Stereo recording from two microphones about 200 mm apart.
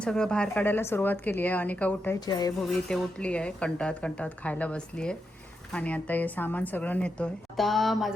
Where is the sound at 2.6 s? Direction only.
5° left (ahead or behind).